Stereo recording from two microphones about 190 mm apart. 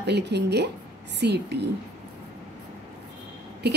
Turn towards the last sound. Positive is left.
turn(degrees=-60)  # may be behind; listen again after turning